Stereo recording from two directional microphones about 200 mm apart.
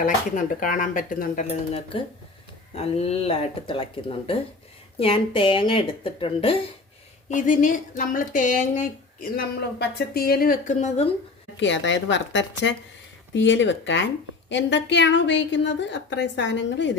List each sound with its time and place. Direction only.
0.0 s speech: 40° left (ahead or behind)
1.5 s speech: 30° left (ahead or behind)
4.9 s speech: 25° left (ahead or behind)
7.3 s speech: 40° left (ahead or behind)
11.6 s a woman's voice: 65° left (ahead or behind)